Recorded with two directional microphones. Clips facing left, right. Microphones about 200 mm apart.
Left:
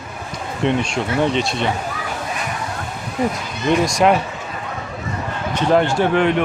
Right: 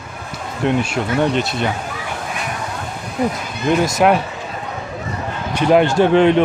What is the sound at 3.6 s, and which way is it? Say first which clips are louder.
Speech: right 1 dB; centre (ahead or behind).